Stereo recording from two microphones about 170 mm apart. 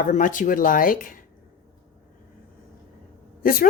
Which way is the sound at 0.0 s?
50° left (ahead or behind).